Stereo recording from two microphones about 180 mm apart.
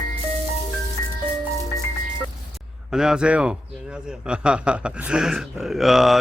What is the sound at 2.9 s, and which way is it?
A man's voice, 5° right (ahead or behind).